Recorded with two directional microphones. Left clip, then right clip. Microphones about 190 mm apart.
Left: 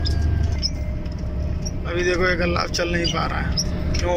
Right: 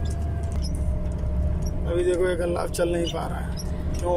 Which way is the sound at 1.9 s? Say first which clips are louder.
Left 2 dB; 15° right (ahead or behind).